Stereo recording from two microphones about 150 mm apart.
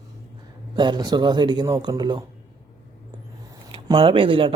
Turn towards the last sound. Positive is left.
turn(degrees=-35)  # may be behind; listen again after turning